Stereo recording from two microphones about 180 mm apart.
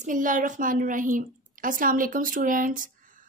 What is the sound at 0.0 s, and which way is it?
Speech, 45° right (ahead or behind).